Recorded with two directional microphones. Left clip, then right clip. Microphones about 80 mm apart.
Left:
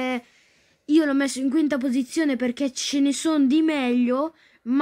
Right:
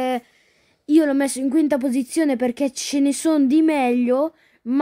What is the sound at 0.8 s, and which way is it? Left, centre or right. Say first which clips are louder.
A woman's voice: right 3 dB; right.